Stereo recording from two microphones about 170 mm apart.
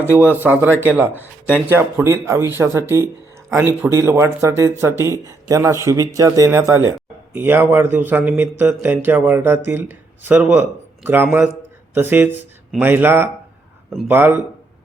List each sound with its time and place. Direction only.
0.0 s a man's voice: 15° right (ahead or behind)